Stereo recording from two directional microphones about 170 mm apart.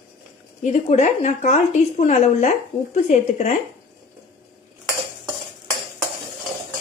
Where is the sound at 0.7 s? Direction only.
45° left (ahead or behind).